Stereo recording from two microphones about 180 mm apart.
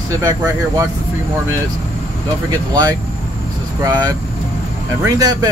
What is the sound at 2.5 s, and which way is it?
Speech, 20° right (ahead or behind).